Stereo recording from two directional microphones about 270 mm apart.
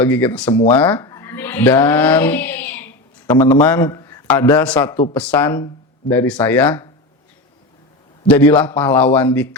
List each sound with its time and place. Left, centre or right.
0.0 s a man's voice: centre
8.3 s a man's voice: centre